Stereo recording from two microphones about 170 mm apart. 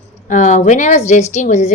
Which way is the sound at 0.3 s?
45° left (ahead or behind).